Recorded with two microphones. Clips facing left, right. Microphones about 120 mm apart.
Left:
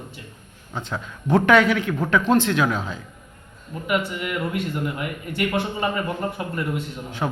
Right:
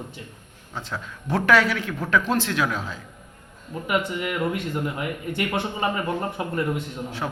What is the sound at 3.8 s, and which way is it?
A man's voice, 25° right (ahead or behind).